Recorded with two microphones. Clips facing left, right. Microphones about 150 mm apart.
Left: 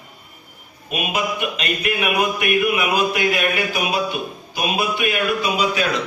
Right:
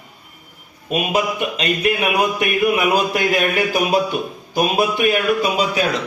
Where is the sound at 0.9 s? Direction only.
35° right (ahead or behind).